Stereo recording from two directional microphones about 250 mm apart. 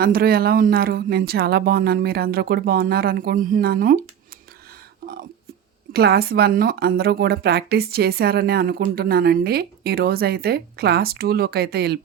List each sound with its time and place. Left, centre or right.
0.0 s speech: right
5.9 s speech: right